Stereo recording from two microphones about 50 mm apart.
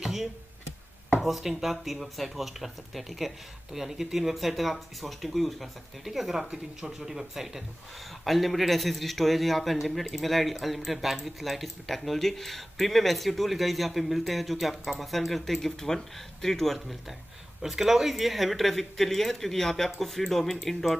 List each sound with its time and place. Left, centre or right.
0.0 s a sound: centre
1.2 s a man's voice: centre
17.6 s a man's voice: centre